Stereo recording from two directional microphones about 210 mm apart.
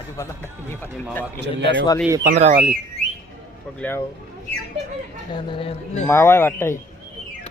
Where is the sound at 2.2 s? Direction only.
35° right (ahead or behind).